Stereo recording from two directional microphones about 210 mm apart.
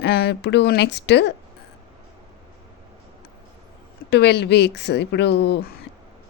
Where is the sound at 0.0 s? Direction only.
50° left (ahead or behind).